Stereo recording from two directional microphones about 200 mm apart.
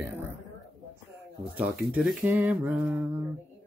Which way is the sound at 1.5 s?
5° right (ahead or behind).